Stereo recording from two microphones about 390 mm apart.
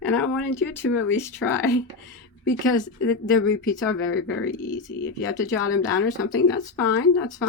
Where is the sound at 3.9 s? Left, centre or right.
Left.